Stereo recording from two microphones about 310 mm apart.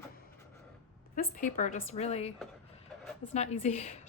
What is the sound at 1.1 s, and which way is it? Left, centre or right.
A woman's voice, left.